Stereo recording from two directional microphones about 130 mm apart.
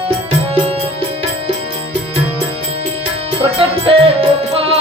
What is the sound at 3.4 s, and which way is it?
Music, 45° right (ahead or behind).